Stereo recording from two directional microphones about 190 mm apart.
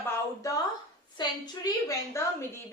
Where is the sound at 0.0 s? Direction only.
15° left (ahead or behind).